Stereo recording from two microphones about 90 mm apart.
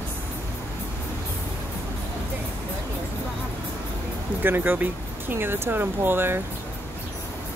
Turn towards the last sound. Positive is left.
turn(degrees=-25)  # may be behind; listen again after turning